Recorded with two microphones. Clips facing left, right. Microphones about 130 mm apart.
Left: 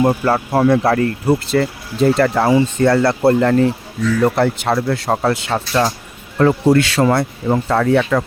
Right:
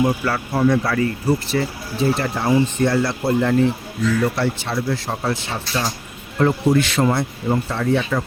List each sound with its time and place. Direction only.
0.0 s speech: 50° left (ahead or behind)
2.1 s speech: 90° left; by 3.5 s 70° left (ahead or behind)
4.2 s speech: 60° left (ahead or behind)
6.4 s speech: 90° left; by 8.2 s 70° left (ahead or behind)